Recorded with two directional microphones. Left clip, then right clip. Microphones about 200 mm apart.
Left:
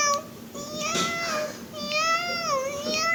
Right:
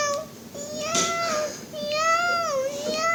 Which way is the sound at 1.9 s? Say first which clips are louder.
Right 2 dB; 15° right (ahead or behind).